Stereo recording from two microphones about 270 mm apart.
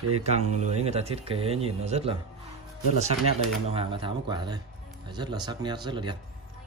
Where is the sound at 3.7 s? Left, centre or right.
Centre.